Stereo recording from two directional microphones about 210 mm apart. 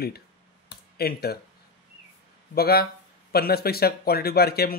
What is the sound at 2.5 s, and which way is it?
Speech, 45° left (ahead or behind).